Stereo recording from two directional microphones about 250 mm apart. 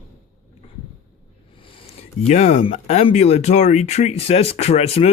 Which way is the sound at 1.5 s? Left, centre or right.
Left.